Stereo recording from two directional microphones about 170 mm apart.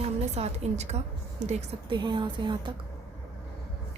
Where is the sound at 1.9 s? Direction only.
25° right (ahead or behind).